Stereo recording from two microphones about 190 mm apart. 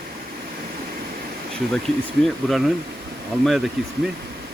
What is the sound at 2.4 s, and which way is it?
Speech, centre (ahead or behind).